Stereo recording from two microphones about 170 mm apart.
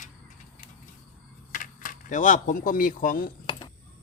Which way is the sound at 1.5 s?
50° left (ahead or behind).